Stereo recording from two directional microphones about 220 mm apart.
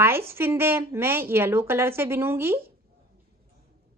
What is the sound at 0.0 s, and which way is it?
A woman's voice, 10° right (ahead or behind).